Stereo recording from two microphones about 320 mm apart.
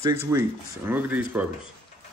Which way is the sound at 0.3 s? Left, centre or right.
Centre.